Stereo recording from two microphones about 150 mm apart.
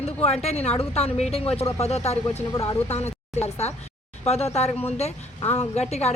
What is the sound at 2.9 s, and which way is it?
Speech, 45° left (ahead or behind).